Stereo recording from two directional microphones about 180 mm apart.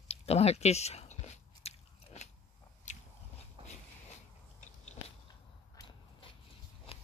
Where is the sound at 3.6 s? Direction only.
30° right (ahead or behind).